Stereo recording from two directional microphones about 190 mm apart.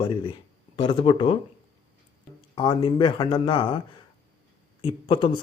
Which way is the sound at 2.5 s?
25° left (ahead or behind).